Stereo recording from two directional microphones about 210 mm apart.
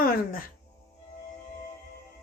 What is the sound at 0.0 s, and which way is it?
Music, 45° left (ahead or behind).